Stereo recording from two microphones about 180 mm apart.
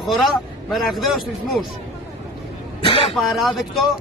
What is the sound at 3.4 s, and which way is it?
Speech, centre (ahead or behind).